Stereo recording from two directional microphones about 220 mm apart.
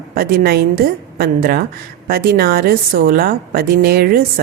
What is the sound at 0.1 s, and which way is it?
A woman's voice, 45° right (ahead or behind).